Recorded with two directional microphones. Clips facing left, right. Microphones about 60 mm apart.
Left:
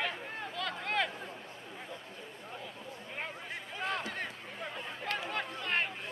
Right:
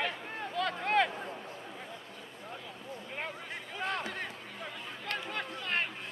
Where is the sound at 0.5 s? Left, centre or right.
Centre.